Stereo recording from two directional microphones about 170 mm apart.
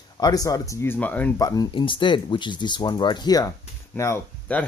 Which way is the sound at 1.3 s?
20° left (ahead or behind).